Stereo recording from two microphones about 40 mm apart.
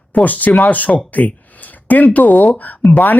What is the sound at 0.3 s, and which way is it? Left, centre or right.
Speech, left.